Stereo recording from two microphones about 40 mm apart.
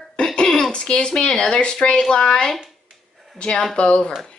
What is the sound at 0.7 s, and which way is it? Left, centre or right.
A woman's voice, left.